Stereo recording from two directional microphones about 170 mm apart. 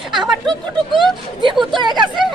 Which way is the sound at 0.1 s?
Centre (ahead or behind).